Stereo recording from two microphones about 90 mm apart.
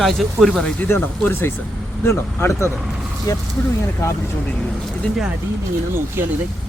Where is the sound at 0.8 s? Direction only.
20° left (ahead or behind); by 3.4 s 40° left (ahead or behind).